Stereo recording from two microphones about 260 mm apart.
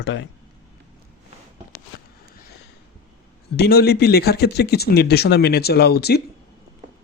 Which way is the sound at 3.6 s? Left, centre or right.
Left.